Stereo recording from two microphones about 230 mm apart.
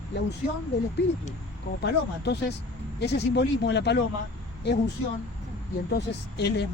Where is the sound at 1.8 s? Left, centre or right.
Left.